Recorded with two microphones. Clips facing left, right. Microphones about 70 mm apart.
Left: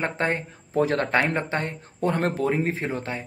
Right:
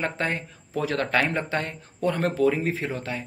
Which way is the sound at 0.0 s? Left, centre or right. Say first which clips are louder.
Left 2 dB; left.